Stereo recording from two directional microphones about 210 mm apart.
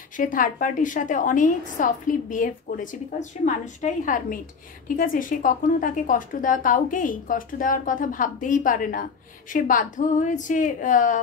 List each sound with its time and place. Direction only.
0.2 s a woman's voice: 40° left (ahead or behind)